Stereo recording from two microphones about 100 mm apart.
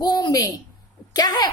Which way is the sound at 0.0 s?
40° left (ahead or behind).